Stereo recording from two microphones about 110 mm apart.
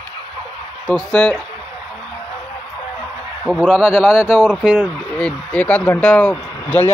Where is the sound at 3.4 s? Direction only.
Centre (ahead or behind).